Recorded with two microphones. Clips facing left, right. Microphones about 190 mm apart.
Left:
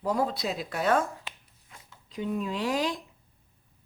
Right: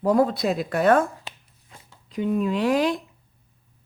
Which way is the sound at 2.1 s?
65° right (ahead or behind).